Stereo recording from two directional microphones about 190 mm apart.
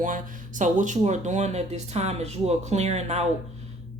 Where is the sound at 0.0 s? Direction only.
45° right (ahead or behind).